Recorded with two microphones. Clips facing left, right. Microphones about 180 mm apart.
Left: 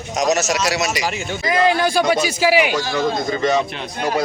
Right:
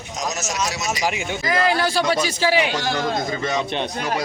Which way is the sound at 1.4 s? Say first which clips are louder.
Left 4 dB; 20° left (ahead or behind).